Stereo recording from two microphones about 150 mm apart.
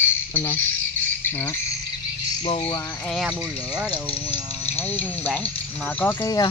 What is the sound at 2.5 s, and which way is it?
Speech, 35° left (ahead or behind).